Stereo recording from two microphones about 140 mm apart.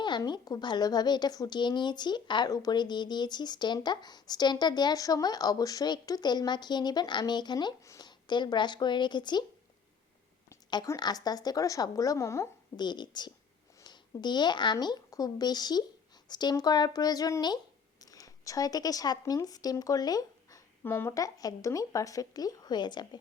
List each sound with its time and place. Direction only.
0.0 s speech: 30° left (ahead or behind)
10.7 s speech: 30° left (ahead or behind)
12.8 s speech: 30° left (ahead or behind)
20.8 s speech: 15° left (ahead or behind); by 23.0 s 30° left (ahead or behind)